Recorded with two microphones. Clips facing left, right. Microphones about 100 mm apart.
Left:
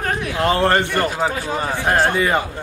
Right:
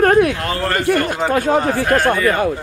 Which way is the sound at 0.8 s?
60° right (ahead or behind).